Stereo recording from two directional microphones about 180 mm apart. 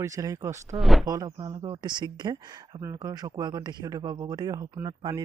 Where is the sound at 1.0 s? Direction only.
20° right (ahead or behind).